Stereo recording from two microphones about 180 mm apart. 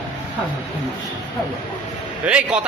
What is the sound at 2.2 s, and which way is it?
Speech, 5° right (ahead or behind).